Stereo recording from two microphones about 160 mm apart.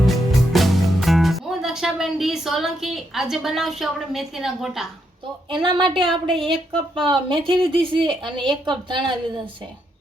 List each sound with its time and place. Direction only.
0.0 s music: centre (ahead or behind)
5.5 s speech: 30° right (ahead or behind)